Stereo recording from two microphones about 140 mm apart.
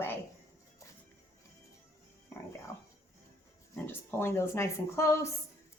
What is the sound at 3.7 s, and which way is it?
A woman's voice, 15° left (ahead or behind).